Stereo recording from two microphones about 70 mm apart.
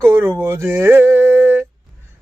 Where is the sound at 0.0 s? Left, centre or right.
Right.